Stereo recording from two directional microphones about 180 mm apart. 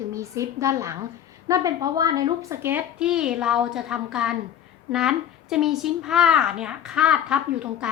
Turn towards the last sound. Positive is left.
turn(degrees=-5)  # may be behind; listen again after turning